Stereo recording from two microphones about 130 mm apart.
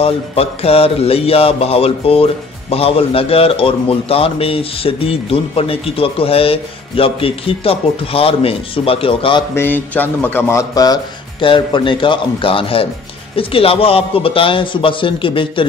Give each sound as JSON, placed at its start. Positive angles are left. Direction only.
{"t": 0.0, "sound": "music", "side_deg": 50}
{"t": 9.6, "sound": "speech", "side_deg": 15}
{"t": 11.4, "sound": "a man's voice", "side_deg": 40}
{"t": 13.4, "sound": "music", "side_deg": 45}